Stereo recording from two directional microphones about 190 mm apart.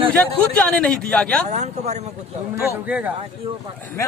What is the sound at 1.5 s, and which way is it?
Speech, 35° right (ahead or behind).